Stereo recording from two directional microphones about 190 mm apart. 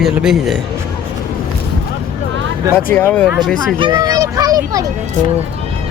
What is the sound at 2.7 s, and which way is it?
Speech, 10° left (ahead or behind).